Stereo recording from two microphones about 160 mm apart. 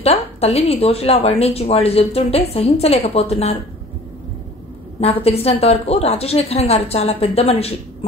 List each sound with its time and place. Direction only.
0.0 s speech: 40° left (ahead or behind)
5.2 s speech: 40° left (ahead or behind)